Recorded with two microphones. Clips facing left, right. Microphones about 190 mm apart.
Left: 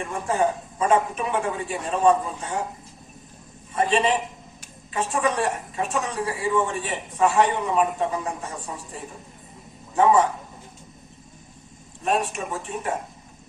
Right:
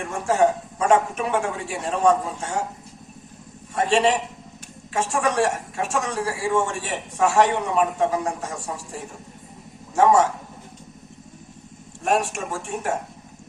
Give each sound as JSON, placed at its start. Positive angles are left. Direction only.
{"t": 0.3, "sound": "a man's voice", "side_deg": -75}
{"t": 3.8, "sound": "a man's voice", "side_deg": -75}
{"t": 10.0, "sound": "a man's voice", "side_deg": -80}
{"t": 12.0, "sound": "a man's voice", "side_deg": -75}